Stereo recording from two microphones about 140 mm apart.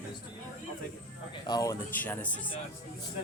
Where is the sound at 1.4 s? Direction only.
30° left (ahead or behind).